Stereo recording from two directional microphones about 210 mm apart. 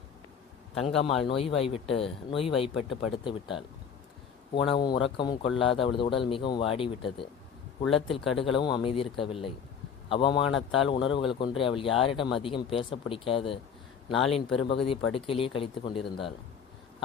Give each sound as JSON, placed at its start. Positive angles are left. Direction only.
{"t": 0.8, "sound": "a man's voice", "side_deg": 25}
{"t": 4.7, "sound": "a man's voice", "side_deg": 20}